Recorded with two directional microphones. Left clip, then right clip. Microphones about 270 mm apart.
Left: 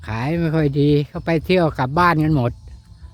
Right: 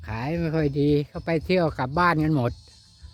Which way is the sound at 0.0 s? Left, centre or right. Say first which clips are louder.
Left 6 dB; centre.